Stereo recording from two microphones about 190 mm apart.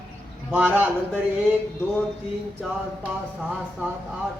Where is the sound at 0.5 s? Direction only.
10° right (ahead or behind).